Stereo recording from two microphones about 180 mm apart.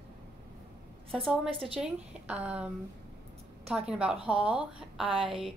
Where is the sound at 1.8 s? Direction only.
10° right (ahead or behind).